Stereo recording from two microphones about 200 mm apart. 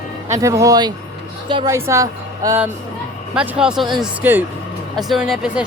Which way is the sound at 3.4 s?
5° right (ahead or behind).